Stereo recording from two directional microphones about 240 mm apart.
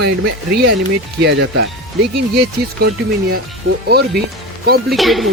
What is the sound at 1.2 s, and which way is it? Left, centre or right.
Speech, right.